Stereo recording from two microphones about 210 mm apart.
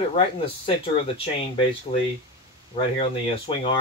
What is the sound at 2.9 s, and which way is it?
Speech, 25° left (ahead or behind).